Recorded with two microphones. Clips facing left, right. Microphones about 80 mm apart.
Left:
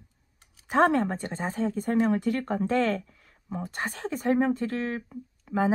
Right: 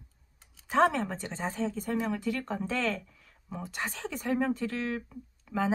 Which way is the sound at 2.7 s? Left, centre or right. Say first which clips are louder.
Left 7 dB; left.